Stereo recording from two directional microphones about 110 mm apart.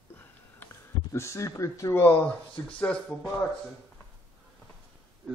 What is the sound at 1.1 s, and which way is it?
Speech, 25° left (ahead or behind).